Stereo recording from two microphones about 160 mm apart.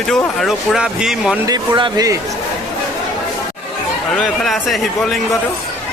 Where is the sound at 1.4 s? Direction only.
25° right (ahead or behind).